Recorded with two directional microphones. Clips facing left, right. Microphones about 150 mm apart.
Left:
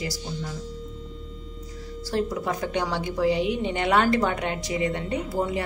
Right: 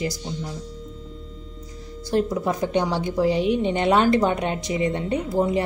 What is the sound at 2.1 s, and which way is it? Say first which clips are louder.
Speech: right 4 dB; 20° right (ahead or behind).